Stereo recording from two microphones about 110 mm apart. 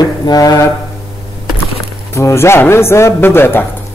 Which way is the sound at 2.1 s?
25° left (ahead or behind).